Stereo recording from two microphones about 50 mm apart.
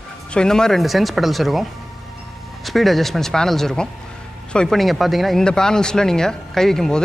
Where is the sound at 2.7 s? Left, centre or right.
Centre.